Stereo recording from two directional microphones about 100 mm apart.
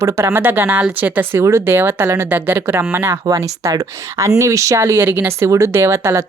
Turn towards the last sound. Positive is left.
turn(degrees=-25)  # may be behind; listen again after turning